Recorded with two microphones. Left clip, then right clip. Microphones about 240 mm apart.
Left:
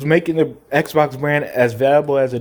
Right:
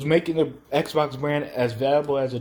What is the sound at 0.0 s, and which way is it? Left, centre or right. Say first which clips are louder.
Speech: left 5 dB; left.